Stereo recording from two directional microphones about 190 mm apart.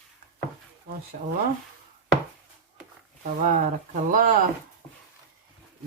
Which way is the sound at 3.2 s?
45° right (ahead or behind).